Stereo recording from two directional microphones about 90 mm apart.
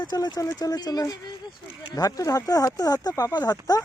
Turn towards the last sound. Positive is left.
turn(degrees=40)  # may be behind; listen again after turning